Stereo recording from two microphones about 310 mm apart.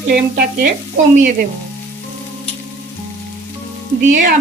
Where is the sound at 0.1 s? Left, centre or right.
Right.